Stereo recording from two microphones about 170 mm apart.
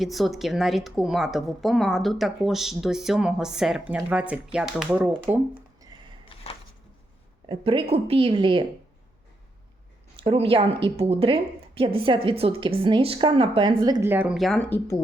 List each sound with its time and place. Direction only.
0.0 s a woman's voice: centre (ahead or behind)
6.2 s a sound: 35° left (ahead or behind)
7.4 s a woman's voice: 30° right (ahead or behind)
10.2 s a woman's voice: 35° right (ahead or behind)
14.1 s a woman's voice: 10° right (ahead or behind); by 14.9 s 10° left (ahead or behind)